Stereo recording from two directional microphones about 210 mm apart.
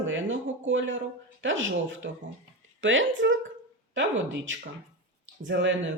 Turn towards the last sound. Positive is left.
turn(degrees=-60)  # may be behind; listen again after turning